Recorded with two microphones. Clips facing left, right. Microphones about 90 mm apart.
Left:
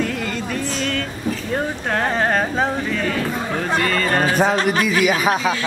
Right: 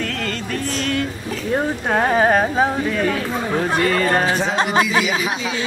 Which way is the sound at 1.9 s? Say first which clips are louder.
Right 4 dB; 10° right (ahead or behind).